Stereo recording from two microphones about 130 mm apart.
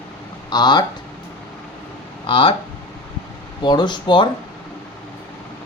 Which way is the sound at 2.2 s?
40° left (ahead or behind).